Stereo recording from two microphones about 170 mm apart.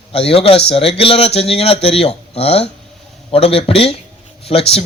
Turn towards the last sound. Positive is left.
turn(degrees=35)  # may be behind; listen again after turning